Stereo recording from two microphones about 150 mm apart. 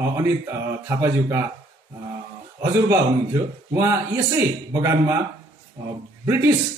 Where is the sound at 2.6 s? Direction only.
20° right (ahead or behind).